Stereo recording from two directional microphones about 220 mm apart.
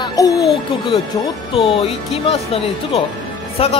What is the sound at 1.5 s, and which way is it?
Speech, 25° left (ahead or behind).